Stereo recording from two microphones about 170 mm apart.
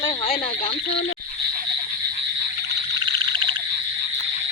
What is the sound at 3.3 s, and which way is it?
Frog, 30° right (ahead or behind).